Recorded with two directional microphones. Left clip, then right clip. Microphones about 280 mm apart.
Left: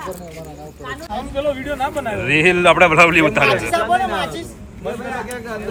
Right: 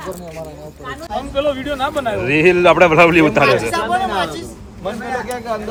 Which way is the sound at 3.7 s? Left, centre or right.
Centre.